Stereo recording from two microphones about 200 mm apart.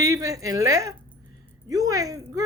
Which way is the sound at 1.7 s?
15° right (ahead or behind).